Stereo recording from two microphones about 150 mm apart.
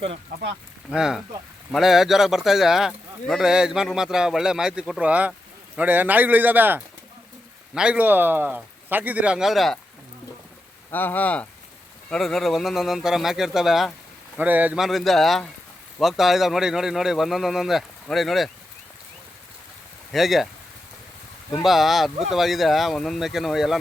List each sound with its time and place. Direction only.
0.3 s speech: 90° right
0.9 s speech: 5° right (ahead or behind)
10.9 s speech: 10° left (ahead or behind)
20.1 s speech: centre (ahead or behind)
21.6 s speech: centre (ahead or behind)